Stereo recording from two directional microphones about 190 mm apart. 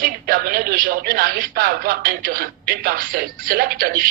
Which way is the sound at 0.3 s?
50° right (ahead or behind).